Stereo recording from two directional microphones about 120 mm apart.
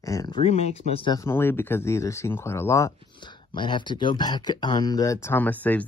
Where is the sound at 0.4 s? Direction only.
65° left (ahead or behind).